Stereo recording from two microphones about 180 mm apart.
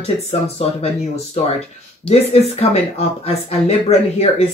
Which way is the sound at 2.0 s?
35° left (ahead or behind).